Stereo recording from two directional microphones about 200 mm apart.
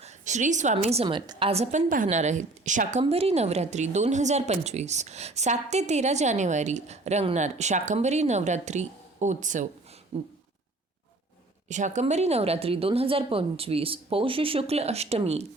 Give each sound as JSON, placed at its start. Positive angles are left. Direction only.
{"t": 0.0, "sound": "a woman's voice", "side_deg": -35}
{"t": 11.7, "sound": "speech", "side_deg": -35}